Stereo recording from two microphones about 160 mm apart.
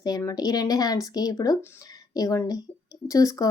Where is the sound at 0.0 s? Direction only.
20° left (ahead or behind).